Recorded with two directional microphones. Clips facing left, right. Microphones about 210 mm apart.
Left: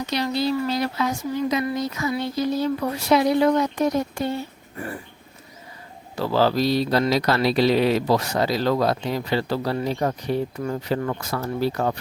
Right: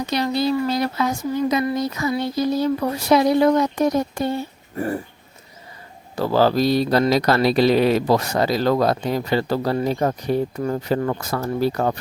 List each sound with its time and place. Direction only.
0.1 s speech: 50° right (ahead or behind)
6.1 s mantra: 45° right (ahead or behind)